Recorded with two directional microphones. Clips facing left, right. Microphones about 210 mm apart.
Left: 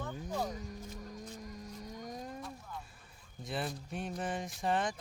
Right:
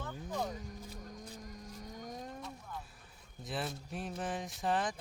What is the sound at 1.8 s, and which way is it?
Vehicle, centre (ahead or behind).